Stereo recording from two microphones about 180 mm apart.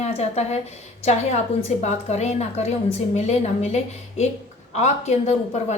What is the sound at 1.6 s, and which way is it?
A woman's voice, 35° left (ahead or behind).